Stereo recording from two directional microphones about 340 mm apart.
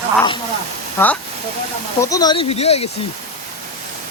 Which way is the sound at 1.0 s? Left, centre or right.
Centre.